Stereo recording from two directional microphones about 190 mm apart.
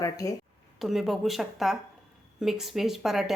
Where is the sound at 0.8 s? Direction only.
Centre (ahead or behind).